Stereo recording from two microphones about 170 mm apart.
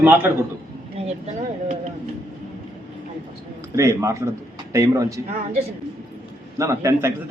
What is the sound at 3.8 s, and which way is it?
A man's voice, 20° right (ahead or behind).